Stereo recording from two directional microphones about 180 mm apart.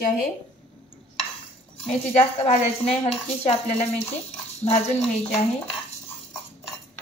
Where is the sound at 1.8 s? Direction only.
35° left (ahead or behind).